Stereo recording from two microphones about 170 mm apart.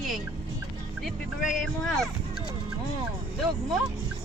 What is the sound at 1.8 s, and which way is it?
Speech, centre (ahead or behind).